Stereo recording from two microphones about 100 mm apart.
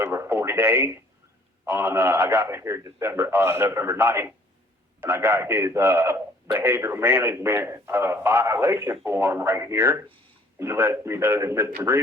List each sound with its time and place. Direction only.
0.0 s a man's voice: 25° right (ahead or behind)